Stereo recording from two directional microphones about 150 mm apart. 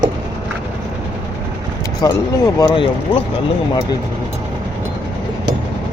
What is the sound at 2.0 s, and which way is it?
Speech, 25° left (ahead or behind).